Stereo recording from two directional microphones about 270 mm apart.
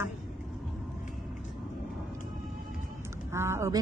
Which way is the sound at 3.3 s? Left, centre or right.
Centre.